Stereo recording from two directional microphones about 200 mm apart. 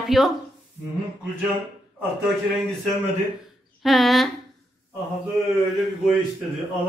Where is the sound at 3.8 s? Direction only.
Centre (ahead or behind).